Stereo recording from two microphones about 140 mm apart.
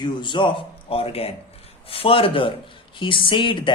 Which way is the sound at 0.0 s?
35° left (ahead or behind).